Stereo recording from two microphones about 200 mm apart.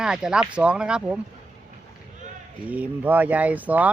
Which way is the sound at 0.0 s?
5° right (ahead or behind).